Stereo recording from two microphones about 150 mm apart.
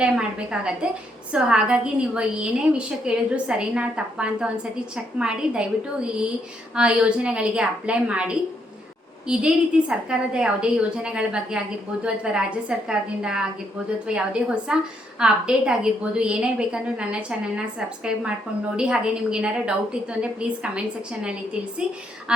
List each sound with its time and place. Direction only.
0.0 s a woman's voice: 5° right (ahead or behind)
6.7 s a woman's voice: 5° right (ahead or behind)